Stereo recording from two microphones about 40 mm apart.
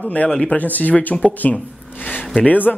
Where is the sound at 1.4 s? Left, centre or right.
Left.